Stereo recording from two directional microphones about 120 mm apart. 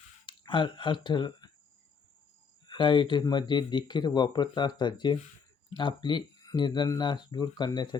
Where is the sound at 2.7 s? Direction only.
40° left (ahead or behind).